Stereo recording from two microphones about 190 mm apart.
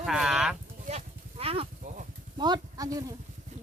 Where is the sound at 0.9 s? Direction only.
35° right (ahead or behind).